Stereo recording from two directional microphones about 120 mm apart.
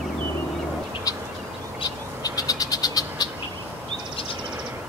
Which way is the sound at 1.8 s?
30° left (ahead or behind).